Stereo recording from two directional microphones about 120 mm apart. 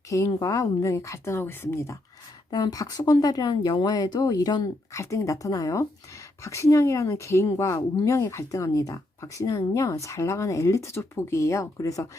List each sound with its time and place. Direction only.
0.1 s a woman's voice: 30° left (ahead or behind)
2.5 s a woman's voice: 35° left (ahead or behind)